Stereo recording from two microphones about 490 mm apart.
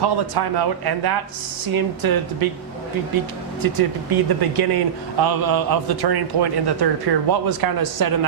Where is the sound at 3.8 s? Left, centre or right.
Right.